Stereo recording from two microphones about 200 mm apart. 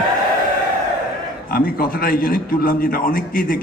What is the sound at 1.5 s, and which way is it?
A man's voice, 50° left (ahead or behind).